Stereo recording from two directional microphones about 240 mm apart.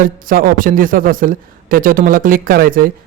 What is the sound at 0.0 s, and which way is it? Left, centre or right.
A man's voice, right.